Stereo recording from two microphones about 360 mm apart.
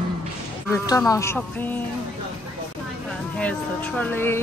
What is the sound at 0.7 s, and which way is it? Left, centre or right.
Speech, centre.